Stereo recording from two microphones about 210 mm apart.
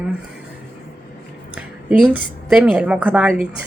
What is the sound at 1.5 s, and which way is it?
A woman's voice, 5° right (ahead or behind).